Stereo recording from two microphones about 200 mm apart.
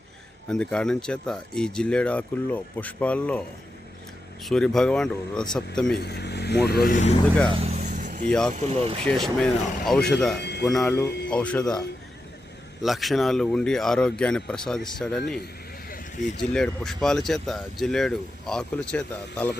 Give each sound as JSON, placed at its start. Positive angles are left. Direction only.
{"t": 0.4, "sound": "speech", "side_deg": 5}
{"t": 4.4, "sound": "speech", "side_deg": 0}
{"t": 6.0, "sound": "speech", "side_deg": 55}
{"t": 7.5, "sound": "vehicle", "side_deg": -35}
{"t": 8.3, "sound": "speech", "side_deg": 5}
{"t": 8.5, "sound": "speech", "side_deg": -30}
{"t": 9.0, "sound": "speech", "side_deg": 5}
{"t": 10.3, "sound": "music", "side_deg": 55}
{"t": 10.6, "sound": "speech", "side_deg": 0}
{"t": 12.8, "sound": "speech", "side_deg": 0}
{"t": 16.4, "sound": "speech", "side_deg": 5}